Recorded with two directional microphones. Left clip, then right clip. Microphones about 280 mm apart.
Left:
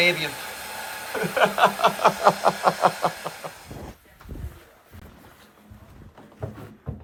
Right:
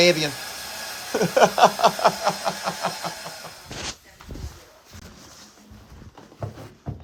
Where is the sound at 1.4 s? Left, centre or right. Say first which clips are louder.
Right 3 dB; centre.